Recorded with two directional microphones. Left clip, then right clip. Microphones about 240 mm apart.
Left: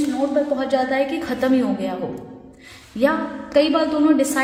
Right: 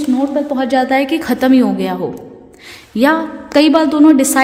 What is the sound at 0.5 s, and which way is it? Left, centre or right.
A woman's voice, right.